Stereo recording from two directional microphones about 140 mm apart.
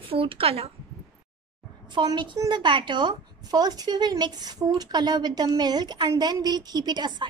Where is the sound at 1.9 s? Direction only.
35° right (ahead or behind).